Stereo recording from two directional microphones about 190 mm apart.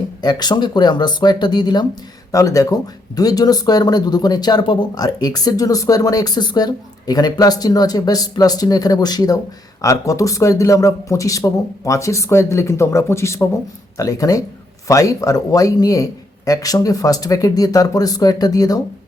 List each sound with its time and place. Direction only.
0.2 s speech: 20° left (ahead or behind)